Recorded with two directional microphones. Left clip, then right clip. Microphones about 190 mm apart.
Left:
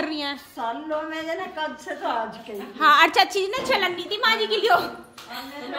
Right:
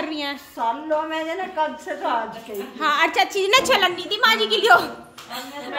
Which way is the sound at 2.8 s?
20° left (ahead or behind).